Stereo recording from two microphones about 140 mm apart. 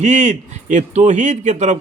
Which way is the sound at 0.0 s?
55° right (ahead or behind).